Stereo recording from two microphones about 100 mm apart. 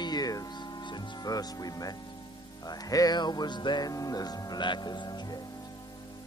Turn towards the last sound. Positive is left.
turn(degrees=45)  # may be behind; listen again after turning